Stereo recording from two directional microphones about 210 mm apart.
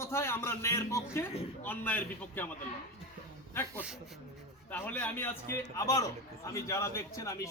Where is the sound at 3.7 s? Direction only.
5° right (ahead or behind).